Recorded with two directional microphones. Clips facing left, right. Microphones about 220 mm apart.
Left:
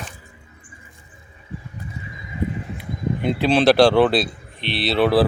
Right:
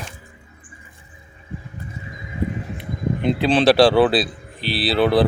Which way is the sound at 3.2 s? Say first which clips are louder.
Even; centre (ahead or behind).